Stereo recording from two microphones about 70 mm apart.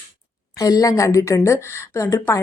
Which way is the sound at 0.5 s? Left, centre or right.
Left.